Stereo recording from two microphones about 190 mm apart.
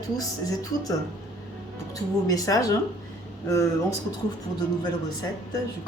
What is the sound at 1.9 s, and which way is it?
A woman's voice, 20° left (ahead or behind).